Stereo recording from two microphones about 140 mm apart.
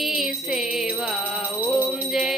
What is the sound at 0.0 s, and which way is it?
Music, centre (ahead or behind).